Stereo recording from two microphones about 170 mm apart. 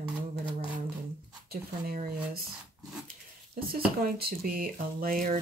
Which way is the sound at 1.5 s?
60° right (ahead or behind).